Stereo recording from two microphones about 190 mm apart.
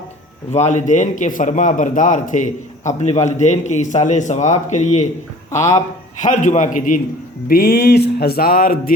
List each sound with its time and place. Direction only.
0.5 s a man's voice: 40° left (ahead or behind)
6.1 s a man's voice: 40° left (ahead or behind)
7.4 s music: 50° left (ahead or behind)